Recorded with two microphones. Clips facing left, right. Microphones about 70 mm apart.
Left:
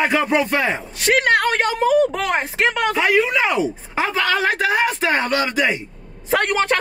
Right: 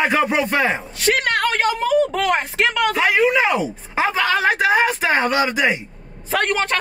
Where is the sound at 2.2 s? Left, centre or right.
Left.